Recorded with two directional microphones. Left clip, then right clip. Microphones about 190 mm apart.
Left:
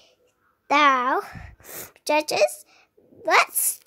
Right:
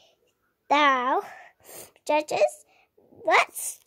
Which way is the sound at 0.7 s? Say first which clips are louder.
Left 3 dB; 5° left (ahead or behind).